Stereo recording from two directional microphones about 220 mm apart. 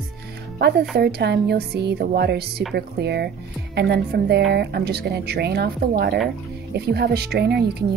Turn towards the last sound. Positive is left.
turn(degrees=-45)  # may be behind; listen again after turning